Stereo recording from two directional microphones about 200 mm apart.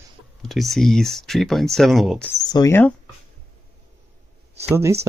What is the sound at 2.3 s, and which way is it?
Speech, 20° left (ahead or behind).